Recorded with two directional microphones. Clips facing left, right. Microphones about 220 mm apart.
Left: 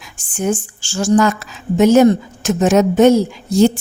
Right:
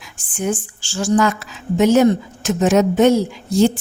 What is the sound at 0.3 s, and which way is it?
Speech, 45° left (ahead or behind).